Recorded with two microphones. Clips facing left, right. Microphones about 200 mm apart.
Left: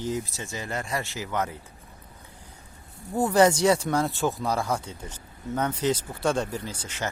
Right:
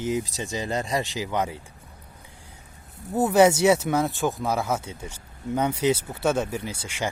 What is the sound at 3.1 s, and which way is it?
A man's voice, 5° right (ahead or behind).